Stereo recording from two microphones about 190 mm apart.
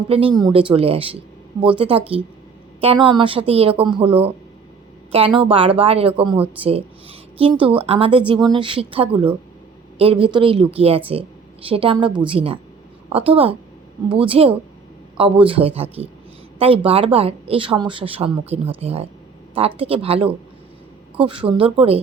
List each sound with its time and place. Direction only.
0.1 s speech: 30° right (ahead or behind)
2.8 s speech: 25° right (ahead or behind)